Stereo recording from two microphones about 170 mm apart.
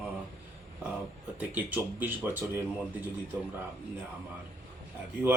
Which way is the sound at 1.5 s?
10° right (ahead or behind).